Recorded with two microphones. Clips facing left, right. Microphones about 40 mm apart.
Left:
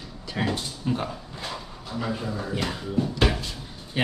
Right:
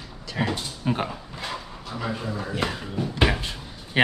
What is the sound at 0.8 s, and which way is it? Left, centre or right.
Speech, right.